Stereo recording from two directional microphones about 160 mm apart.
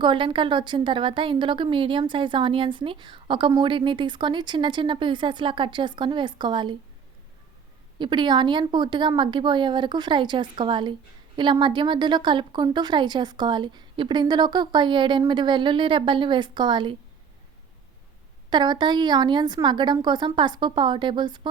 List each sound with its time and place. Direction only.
0.0 s a woman's voice: 30° right (ahead or behind)
7.9 s a woman's voice: 30° right (ahead or behind)
18.5 s a woman's voice: 25° right (ahead or behind)